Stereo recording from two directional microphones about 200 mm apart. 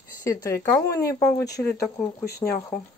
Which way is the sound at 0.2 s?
15° left (ahead or behind).